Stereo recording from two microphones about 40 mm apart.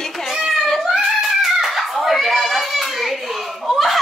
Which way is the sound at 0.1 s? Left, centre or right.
Centre.